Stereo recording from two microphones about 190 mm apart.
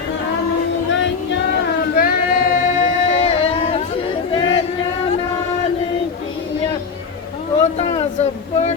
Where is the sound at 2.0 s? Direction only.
50° left (ahead or behind).